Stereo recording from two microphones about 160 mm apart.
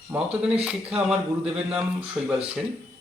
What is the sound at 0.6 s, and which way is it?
Speech, 5° right (ahead or behind).